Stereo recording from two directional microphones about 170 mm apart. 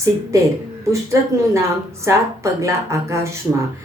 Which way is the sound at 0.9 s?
15° right (ahead or behind).